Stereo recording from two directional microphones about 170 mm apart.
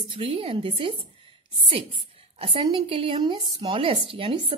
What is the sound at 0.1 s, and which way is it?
Speech, 35° right (ahead or behind).